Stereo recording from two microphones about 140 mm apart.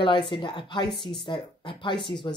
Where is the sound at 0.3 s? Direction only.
35° left (ahead or behind).